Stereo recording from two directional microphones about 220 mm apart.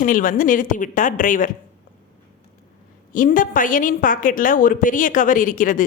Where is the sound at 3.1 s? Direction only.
40° left (ahead or behind).